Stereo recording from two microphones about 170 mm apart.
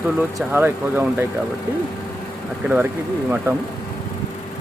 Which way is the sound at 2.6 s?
5° right (ahead or behind).